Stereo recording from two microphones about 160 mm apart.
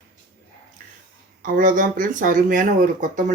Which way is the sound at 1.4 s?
55° right (ahead or behind).